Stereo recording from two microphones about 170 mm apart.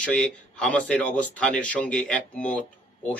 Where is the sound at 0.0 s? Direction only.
5° left (ahead or behind).